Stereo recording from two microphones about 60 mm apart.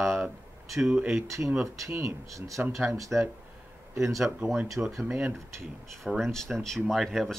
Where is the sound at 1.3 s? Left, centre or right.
Right.